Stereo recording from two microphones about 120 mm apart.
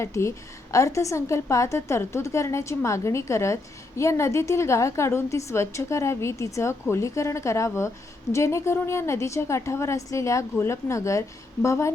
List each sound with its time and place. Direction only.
0.0 s a woman's voice: 25° left (ahead or behind)